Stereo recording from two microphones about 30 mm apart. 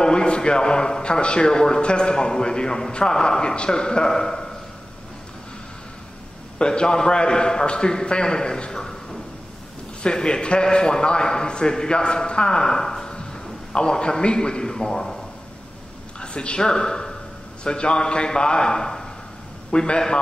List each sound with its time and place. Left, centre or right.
0.0 s a man's voice: left
6.6 s a man's voice: left
10.0 s a man's voice: left
16.2 s a man's voice: left